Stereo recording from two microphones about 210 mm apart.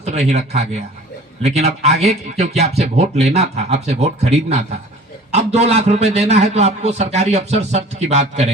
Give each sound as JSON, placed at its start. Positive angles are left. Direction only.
{"t": 0.0, "sound": "a man's voice", "side_deg": -30}